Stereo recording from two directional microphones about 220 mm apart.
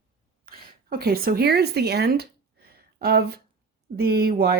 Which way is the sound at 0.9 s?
45° right (ahead or behind).